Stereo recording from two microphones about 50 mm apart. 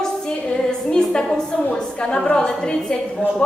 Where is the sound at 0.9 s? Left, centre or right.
Centre.